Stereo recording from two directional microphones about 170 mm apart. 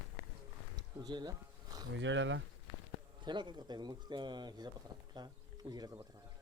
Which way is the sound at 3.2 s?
25° right (ahead or behind).